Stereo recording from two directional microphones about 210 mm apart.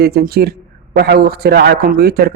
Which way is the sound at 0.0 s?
50° right (ahead or behind).